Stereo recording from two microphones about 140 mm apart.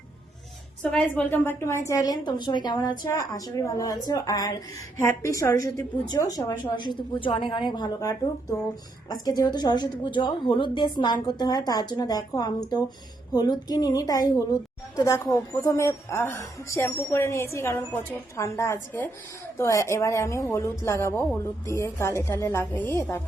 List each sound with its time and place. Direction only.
0.8 s a woman's voice: 10° left (ahead or behind)